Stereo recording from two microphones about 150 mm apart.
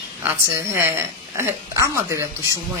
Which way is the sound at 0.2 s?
15° right (ahead or behind).